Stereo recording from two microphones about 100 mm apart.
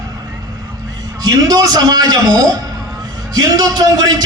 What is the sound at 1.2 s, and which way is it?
A man's voice, 40° right (ahead or behind).